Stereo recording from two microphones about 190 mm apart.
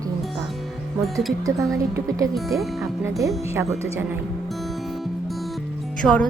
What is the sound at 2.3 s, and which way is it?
Speech, centre (ahead or behind).